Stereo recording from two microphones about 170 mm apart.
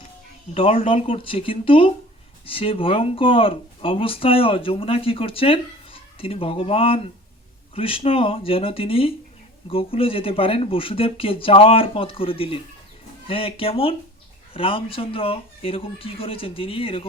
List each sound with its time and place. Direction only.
0.5 s speech: 35° left (ahead or behind)